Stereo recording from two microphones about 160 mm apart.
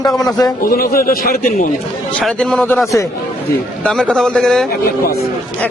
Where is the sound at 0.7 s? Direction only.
70° left (ahead or behind).